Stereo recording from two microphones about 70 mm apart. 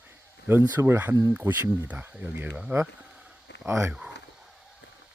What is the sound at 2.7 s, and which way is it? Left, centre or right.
Mantra, right.